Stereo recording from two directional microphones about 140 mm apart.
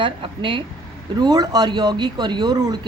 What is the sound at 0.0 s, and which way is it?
Speech, 35° right (ahead or behind).